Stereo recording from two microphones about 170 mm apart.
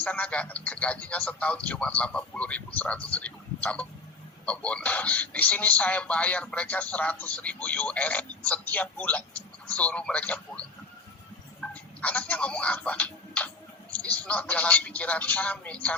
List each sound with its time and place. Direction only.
0.0 s speech: 5° left (ahead or behind)